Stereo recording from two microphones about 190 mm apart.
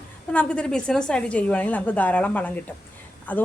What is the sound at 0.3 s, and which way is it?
A woman's voice, 5° left (ahead or behind).